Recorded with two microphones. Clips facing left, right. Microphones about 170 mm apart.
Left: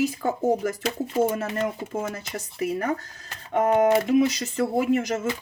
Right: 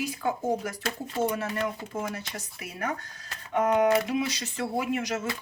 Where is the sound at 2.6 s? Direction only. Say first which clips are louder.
Left 8 dB; 40° left (ahead or behind).